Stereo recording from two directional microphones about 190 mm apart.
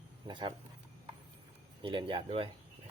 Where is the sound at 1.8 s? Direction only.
25° right (ahead or behind).